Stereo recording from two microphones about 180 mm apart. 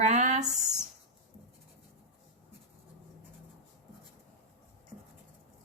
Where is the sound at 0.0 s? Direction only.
40° right (ahead or behind).